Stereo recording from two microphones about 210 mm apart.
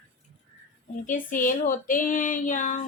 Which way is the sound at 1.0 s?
40° left (ahead or behind).